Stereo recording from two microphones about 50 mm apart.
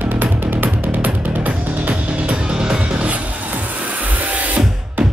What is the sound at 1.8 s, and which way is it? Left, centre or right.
Music, right.